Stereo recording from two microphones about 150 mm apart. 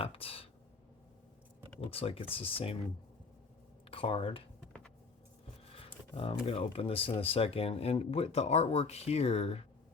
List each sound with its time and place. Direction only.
0.0 s a sound: 40° left (ahead or behind)
1.8 s speech: 40° left (ahead or behind)
3.8 s speech: 40° left (ahead or behind)
5.7 s speech: 40° left (ahead or behind)